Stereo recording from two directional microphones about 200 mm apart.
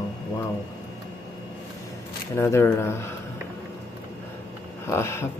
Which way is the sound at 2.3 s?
10° left (ahead or behind).